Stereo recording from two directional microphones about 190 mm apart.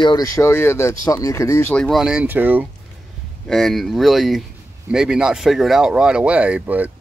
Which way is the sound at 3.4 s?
Centre (ahead or behind).